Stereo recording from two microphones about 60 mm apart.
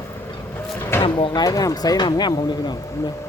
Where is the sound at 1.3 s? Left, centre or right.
Left.